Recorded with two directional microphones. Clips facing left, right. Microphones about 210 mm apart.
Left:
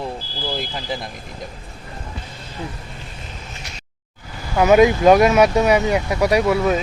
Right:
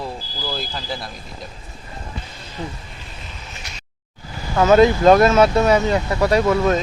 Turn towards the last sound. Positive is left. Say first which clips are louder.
# even
turn(degrees=10)  # may be behind; listen again after turning